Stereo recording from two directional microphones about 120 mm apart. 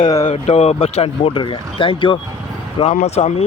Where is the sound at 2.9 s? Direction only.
70° left (ahead or behind).